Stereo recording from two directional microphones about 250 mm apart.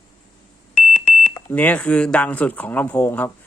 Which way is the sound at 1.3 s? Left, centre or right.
Centre.